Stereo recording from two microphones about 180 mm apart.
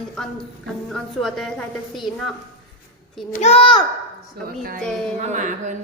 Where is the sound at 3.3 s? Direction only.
35° left (ahead or behind).